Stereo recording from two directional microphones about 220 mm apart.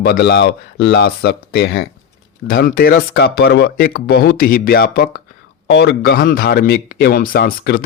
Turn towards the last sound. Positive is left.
turn(degrees=45)  # may be behind; listen again after turning